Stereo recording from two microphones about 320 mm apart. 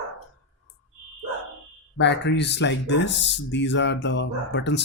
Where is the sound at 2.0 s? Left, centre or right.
Left.